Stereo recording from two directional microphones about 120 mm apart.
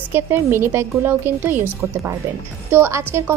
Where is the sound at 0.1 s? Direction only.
20° right (ahead or behind).